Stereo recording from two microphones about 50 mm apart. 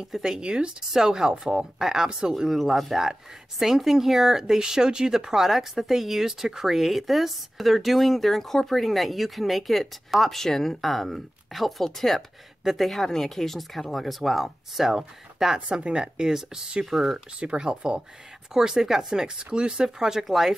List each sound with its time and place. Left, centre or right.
0.0 s speech: centre
17.4 s speech: centre